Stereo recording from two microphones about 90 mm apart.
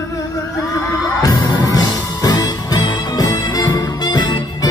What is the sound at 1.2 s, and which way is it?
Music, 45° left (ahead or behind).